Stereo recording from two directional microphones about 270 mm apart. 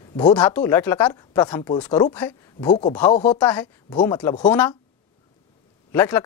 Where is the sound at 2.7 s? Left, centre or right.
Centre.